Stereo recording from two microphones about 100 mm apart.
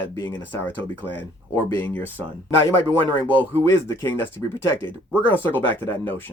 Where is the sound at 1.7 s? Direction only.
20° left (ahead or behind).